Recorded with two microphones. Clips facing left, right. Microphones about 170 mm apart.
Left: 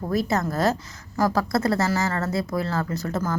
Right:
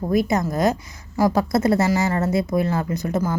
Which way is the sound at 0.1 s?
15° right (ahead or behind).